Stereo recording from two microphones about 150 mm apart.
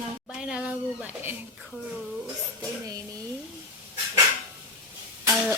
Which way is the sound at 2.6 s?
25° right (ahead or behind).